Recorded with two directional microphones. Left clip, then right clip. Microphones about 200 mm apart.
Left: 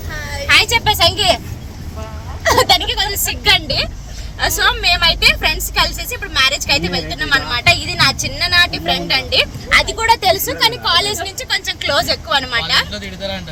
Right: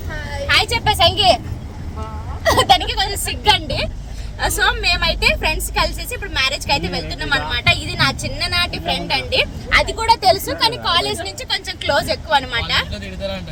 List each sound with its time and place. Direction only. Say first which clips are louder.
0.4 s speech: left 4 dB; centre (ahead or behind)
2.4 s a woman's voice: left 1 dB; centre (ahead or behind)
12.9 s speech: left 2 dB; 10° right (ahead or behind)